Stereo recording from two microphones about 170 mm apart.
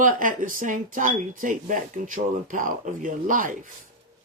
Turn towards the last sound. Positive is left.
turn(degrees=-55)  # may be behind; listen again after turning